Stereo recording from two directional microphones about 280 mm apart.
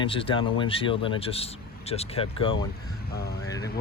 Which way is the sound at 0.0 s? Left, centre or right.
Centre.